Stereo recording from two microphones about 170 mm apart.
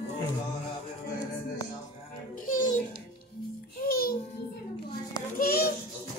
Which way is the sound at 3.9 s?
60° left (ahead or behind).